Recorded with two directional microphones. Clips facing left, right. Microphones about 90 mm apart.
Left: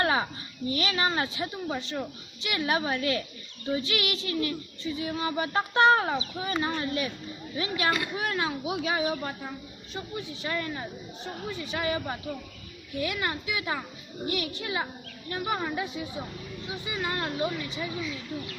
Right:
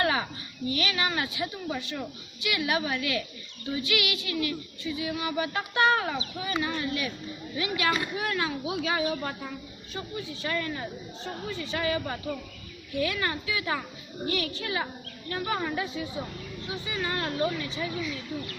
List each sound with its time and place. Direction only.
0.0 s a sound: 30° left (ahead or behind)
8.3 s a woman's voice: 25° left (ahead or behind)
10.4 s a woman's voice: 20° left (ahead or behind)